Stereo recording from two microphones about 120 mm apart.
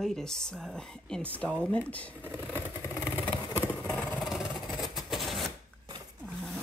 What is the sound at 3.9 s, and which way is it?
Vehicle, 5° left (ahead or behind).